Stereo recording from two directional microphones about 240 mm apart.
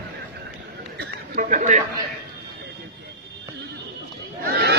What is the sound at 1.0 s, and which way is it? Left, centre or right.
Chatter, right.